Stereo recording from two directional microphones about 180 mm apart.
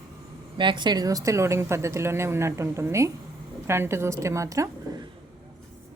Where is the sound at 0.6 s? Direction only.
25° right (ahead or behind).